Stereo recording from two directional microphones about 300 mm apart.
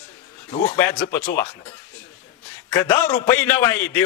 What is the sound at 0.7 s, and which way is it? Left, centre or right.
A man's voice, centre.